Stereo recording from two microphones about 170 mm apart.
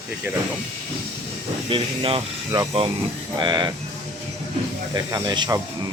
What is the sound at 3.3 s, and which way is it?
Speech, 25° right (ahead or behind).